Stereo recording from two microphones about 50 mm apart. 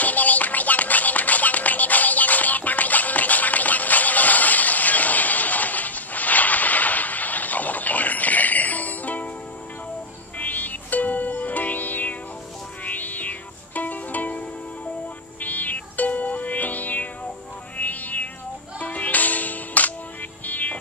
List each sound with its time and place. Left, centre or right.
0.0 s music: left
10.4 s music: left
15.4 s music: left